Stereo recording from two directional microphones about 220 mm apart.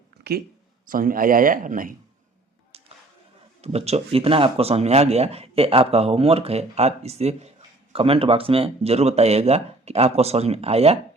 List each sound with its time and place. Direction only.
0.3 s speech: 50° right (ahead or behind)
3.6 s speech: 30° right (ahead or behind)